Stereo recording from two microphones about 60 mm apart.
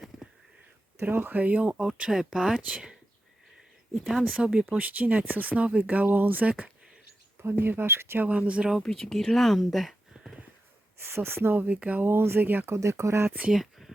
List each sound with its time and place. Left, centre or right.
1.0 s speech: right; by 2.5 s centre
2.6 s speech: right
3.9 s speech: centre
4.7 s speech: right
7.6 s speech: right
8.2 s speech: right
8.8 s speech: centre
10.9 s speech: right
12.0 s speech: right
12.7 s speech: right
13.5 s a sound: centre